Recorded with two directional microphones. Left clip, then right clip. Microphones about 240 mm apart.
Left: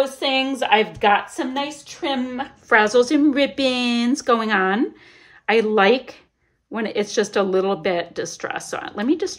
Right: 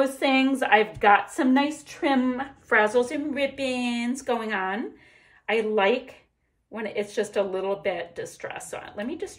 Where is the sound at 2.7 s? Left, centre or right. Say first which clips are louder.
Left 6 dB; centre.